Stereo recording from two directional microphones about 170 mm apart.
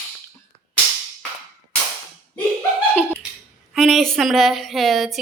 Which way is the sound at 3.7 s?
Centre (ahead or behind).